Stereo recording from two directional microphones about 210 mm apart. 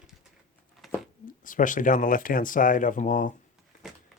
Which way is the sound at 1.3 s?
40° left (ahead or behind).